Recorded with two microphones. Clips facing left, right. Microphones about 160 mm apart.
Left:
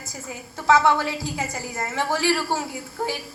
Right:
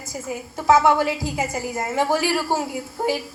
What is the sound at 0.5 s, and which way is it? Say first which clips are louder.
A woman's voice: right 2 dB; 10° right (ahead or behind).